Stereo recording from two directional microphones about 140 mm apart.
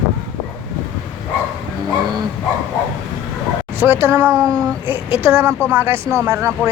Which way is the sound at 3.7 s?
15° right (ahead or behind).